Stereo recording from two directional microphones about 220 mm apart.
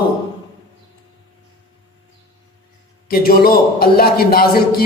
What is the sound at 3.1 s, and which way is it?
A man's voice, 40° left (ahead or behind).